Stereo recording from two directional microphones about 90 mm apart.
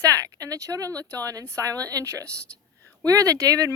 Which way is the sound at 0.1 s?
40° right (ahead or behind).